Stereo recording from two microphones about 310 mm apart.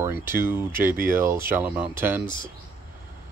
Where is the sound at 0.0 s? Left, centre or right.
Centre.